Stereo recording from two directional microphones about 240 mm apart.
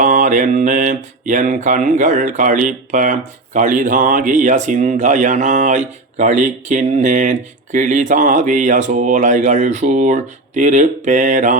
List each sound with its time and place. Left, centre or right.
0.0 s mantra: right